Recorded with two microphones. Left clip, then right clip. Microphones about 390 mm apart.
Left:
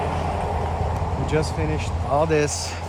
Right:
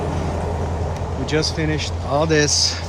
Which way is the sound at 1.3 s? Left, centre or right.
Centre.